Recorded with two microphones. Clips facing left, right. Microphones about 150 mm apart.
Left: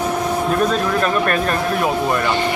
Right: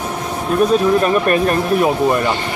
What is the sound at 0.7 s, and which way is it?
Speech, 15° right (ahead or behind).